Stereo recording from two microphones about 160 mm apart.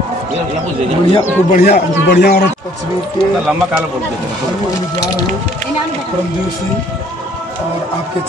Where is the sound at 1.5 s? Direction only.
75° left (ahead or behind).